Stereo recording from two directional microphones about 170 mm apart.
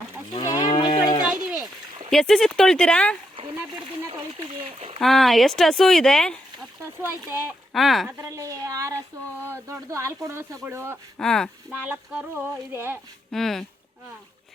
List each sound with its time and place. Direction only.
0.3 s livestock: 20° left (ahead or behind)
1.3 s a sound: 5° right (ahead or behind)
2.0 s speech: centre (ahead or behind)
4.4 s a sound: 35° right (ahead or behind)
4.9 s speech: centre (ahead or behind)
7.0 s speech: 15° right (ahead or behind)
7.7 s speech: centre (ahead or behind)
8.2 s speech: 20° right (ahead or behind)
11.2 s speech: 5° left (ahead or behind)
11.7 s speech: 10° right (ahead or behind)
13.3 s speech: centre (ahead or behind)